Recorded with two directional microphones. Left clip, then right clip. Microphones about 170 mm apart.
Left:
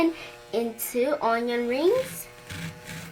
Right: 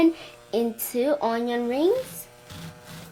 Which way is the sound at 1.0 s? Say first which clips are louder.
Even; 55° right (ahead or behind).